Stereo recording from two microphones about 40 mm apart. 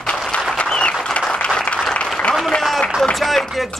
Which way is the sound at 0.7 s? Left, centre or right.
Left.